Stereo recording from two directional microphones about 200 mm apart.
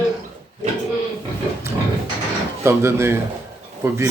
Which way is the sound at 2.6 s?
15° right (ahead or behind).